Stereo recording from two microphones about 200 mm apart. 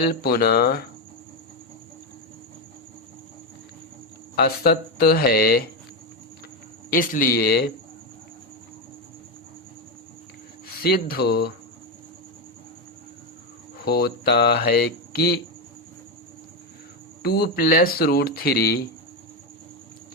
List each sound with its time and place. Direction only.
0.1 s speech: 50° left (ahead or behind)
4.4 s speech: 50° left (ahead or behind)
6.9 s speech: 45° left (ahead or behind)
10.7 s speech: 50° left (ahead or behind)
13.8 s speech: 50° left (ahead or behind)
17.2 s speech: 50° left (ahead or behind)